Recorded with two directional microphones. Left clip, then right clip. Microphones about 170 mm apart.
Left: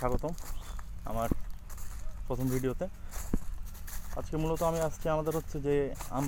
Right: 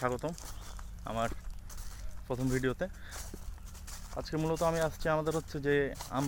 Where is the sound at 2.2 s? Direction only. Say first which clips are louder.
Even; 15° right (ahead or behind).